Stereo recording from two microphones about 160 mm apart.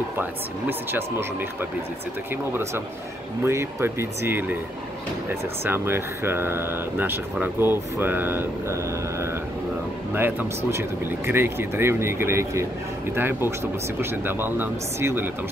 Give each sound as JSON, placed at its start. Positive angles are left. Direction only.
{"t": 0.2, "sound": "speech", "side_deg": -15}
{"t": 2.5, "sound": "speech", "side_deg": -15}
{"t": 5.6, "sound": "speech", "side_deg": -15}